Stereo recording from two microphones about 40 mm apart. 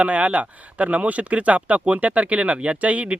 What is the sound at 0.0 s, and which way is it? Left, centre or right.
Speech, right.